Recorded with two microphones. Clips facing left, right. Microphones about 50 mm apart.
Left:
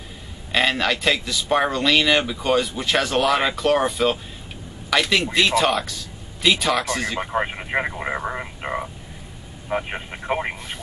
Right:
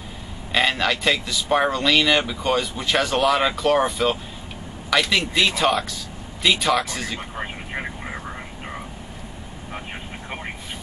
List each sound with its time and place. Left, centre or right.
0.5 s speech: centre
7.7 s vehicle: left
9.7 s speech: left